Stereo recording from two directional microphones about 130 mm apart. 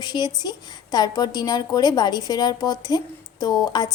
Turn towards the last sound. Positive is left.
turn(degrees=30)  # may be behind; listen again after turning